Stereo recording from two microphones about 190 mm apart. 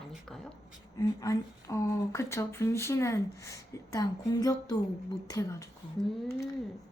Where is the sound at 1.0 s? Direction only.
20° left (ahead or behind).